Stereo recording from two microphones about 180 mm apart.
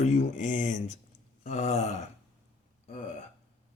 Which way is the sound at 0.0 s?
40° left (ahead or behind).